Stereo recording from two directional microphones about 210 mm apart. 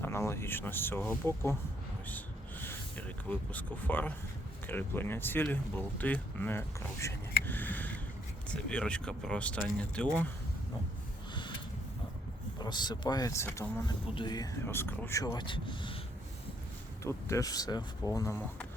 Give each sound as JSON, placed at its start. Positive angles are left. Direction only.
{"t": 0.0, "sound": "speech", "side_deg": 10}
{"t": 2.0, "sound": "rub", "side_deg": 10}
{"t": 3.2, "sound": "speech", "side_deg": 10}
{"t": 7.4, "sound": "a sound", "side_deg": 10}
{"t": 8.7, "sound": "speech", "side_deg": 5}
{"t": 12.5, "sound": "speech", "side_deg": 20}
{"t": 17.0, "sound": "speech", "side_deg": 15}